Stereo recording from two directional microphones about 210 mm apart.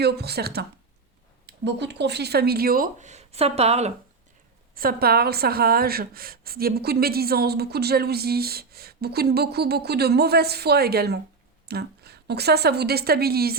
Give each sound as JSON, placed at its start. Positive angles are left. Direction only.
{"t": 0.0, "sound": "speech", "side_deg": -50}
{"t": 4.7, "sound": "speech", "side_deg": -45}